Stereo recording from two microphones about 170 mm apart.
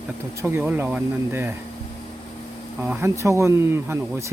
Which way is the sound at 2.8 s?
10° right (ahead or behind).